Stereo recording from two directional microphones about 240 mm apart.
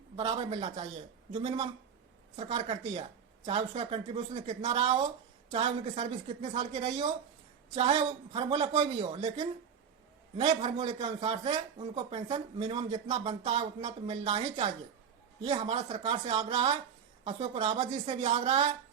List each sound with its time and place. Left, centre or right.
0.2 s speech: centre